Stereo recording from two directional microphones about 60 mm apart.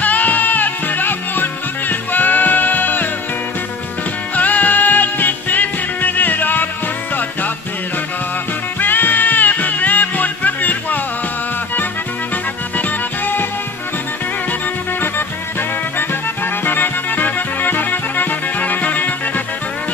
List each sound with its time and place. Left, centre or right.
0.0 s music: left
4.4 s music: left
8.7 s music: left
12.7 s music: left
16.6 s music: left